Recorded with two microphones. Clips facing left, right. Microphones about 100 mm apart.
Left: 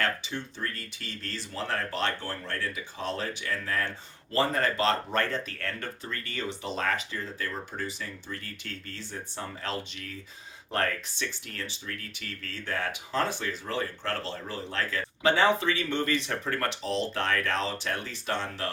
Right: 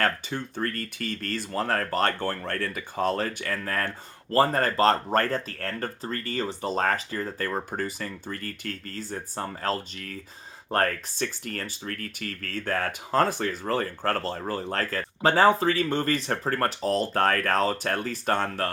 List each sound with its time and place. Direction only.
0.0 s speech: 50° right (ahead or behind)